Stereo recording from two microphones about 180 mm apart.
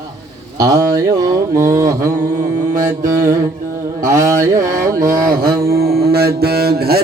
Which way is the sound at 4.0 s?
15° right (ahead or behind).